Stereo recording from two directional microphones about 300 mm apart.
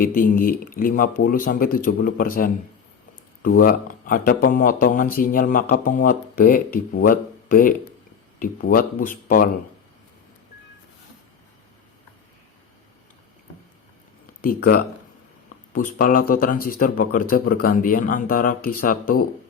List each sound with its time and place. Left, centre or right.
0.0 s speech: left
14.4 s speech: left